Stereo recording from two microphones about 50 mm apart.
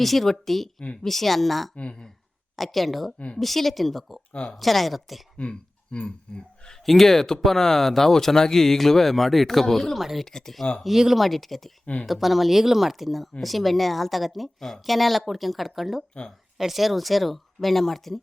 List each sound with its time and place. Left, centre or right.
0.0 s speech: centre
1.7 s speech: left
2.6 s speech: centre
5.4 s speech: left
6.8 s speech: centre
10.8 s speech: centre